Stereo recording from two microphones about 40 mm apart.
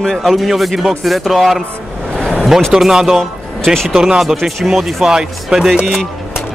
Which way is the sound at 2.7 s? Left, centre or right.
Centre.